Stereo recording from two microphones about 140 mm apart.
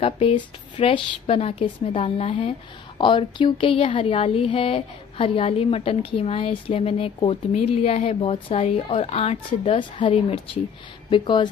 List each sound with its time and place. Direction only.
0.0 s a woman's voice: 40° left (ahead or behind)